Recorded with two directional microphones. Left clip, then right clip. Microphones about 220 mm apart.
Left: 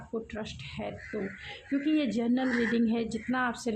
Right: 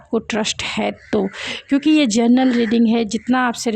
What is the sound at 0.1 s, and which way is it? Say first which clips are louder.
Speech: right 17 dB; 45° right (ahead or behind).